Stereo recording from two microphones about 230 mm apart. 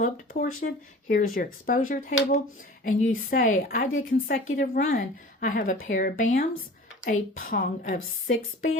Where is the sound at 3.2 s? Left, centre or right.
Left.